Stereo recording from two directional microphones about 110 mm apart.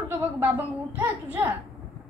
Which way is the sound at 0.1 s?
15° right (ahead or behind).